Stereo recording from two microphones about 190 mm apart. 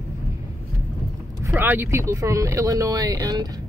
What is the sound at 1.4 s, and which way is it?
Speech, 10° right (ahead or behind).